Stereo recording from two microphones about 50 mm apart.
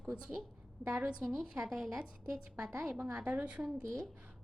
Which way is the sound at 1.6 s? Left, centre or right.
Centre.